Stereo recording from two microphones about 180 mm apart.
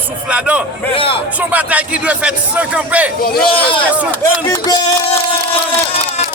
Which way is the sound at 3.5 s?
30° left (ahead or behind).